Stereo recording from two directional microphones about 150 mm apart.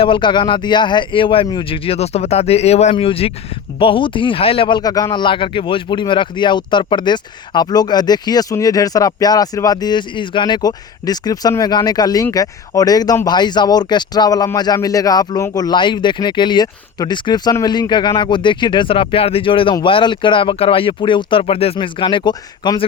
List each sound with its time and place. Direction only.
0.0 s speech: 35° left (ahead or behind)